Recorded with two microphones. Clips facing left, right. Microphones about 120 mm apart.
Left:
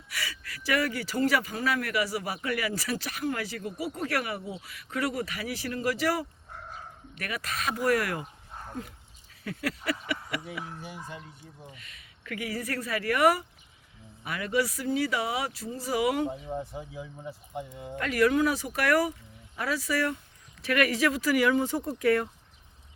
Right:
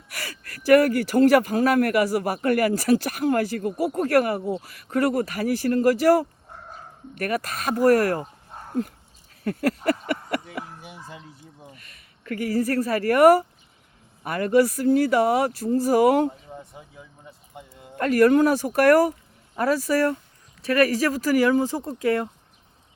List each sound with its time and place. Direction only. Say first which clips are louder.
0.1 s speech: right 1 dB; 50° right (ahead or behind)
9.4 s a sound: right 9 dB; 45° right (ahead or behind)
12.2 s speech: right 10 dB; 40° right (ahead or behind)
16.6 s speech: left 6 dB; centre (ahead or behind)
17.9 s speech: right 7 dB; 45° right (ahead or behind); by 22.3 s 25° right (ahead or behind)